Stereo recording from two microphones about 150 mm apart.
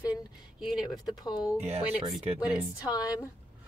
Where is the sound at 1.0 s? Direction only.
25° left (ahead or behind).